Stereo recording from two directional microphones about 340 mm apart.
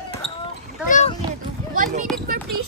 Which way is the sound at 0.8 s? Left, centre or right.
Left.